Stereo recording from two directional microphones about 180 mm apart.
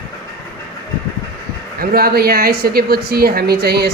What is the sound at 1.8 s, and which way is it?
A woman's voice, 55° right (ahead or behind).